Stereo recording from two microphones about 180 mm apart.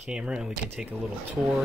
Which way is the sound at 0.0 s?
5° right (ahead or behind).